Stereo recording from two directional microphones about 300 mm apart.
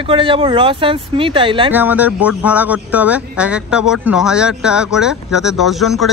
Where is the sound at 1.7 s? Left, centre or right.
Centre.